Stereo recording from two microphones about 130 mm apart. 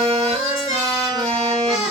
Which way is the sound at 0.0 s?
50° right (ahead or behind).